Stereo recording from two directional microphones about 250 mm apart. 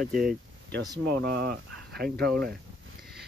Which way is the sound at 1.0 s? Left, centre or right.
Right.